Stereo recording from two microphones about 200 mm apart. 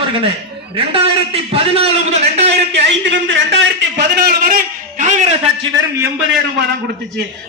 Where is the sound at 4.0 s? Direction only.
50° right (ahead or behind); by 5.7 s 35° right (ahead or behind).